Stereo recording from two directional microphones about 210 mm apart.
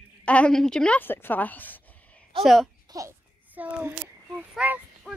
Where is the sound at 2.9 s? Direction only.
15° right (ahead or behind).